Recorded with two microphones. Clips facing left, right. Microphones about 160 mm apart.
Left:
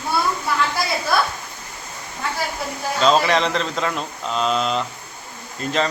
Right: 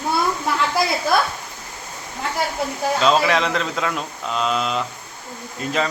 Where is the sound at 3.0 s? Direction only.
Centre (ahead or behind).